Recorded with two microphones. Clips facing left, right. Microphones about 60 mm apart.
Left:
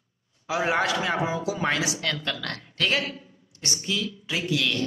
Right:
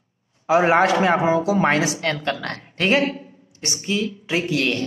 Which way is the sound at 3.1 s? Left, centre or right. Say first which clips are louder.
Right 9 dB; right.